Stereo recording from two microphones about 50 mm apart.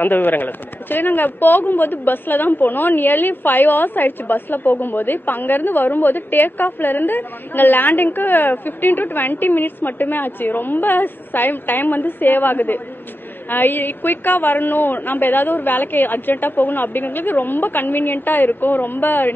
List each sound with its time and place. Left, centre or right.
0.0 s speech: left